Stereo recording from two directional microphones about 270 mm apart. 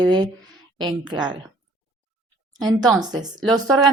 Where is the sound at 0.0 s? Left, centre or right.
Centre.